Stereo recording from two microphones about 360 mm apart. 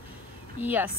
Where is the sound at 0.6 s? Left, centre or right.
Centre.